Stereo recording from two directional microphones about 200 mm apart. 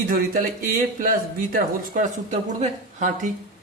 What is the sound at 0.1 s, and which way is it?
A woman's voice, 45° right (ahead or behind).